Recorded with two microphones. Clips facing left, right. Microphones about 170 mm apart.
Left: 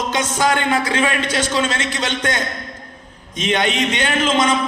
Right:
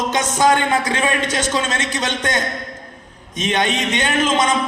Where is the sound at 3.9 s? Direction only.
20° right (ahead or behind).